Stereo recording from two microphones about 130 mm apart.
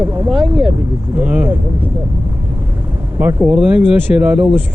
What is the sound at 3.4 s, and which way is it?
Speech, 10° right (ahead or behind).